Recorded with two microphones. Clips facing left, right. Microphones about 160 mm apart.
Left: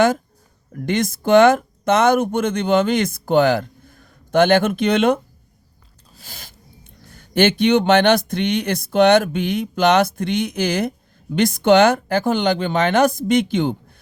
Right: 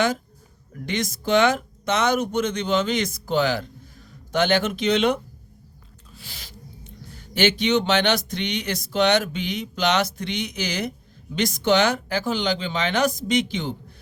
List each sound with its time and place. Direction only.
0.7 s speech: 50° left (ahead or behind)